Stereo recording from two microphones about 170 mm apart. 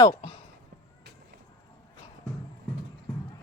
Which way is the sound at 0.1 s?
30° left (ahead or behind).